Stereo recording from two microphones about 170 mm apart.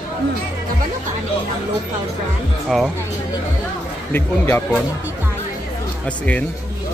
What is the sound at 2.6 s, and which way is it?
Speech, centre (ahead or behind).